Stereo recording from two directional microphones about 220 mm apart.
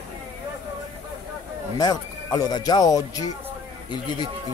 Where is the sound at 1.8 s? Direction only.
15° left (ahead or behind).